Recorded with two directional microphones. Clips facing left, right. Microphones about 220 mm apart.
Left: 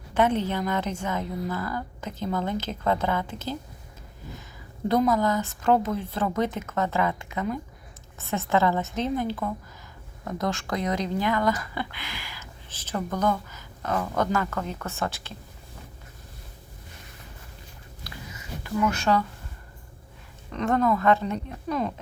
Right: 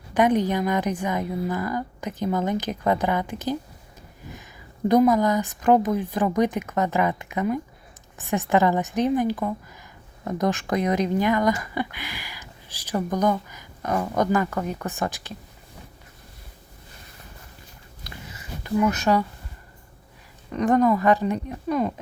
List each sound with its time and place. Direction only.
0.1 s speech: 15° right (ahead or behind)
4.9 s speech: 15° right (ahead or behind)
18.3 s a sound: 20° right (ahead or behind)
20.5 s speech: 15° right (ahead or behind)